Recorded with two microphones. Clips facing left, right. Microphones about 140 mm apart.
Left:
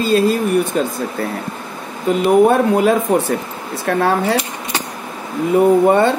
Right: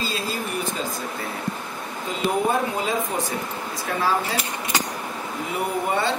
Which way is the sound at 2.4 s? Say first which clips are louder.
Left 11 dB; 65° left (ahead or behind).